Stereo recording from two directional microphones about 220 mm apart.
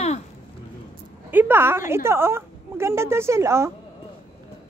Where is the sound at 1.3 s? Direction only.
10° right (ahead or behind).